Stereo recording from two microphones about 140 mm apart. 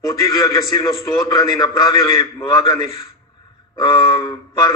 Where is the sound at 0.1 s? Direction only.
25° left (ahead or behind).